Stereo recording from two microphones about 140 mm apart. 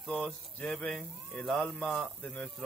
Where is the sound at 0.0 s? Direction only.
5° left (ahead or behind).